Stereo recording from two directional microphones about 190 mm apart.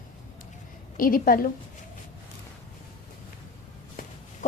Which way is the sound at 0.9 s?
50° left (ahead or behind).